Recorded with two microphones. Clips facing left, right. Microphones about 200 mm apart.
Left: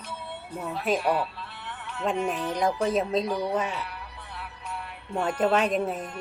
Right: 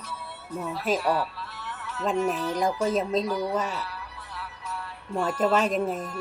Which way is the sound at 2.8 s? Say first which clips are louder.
Right 1 dB; centre (ahead or behind).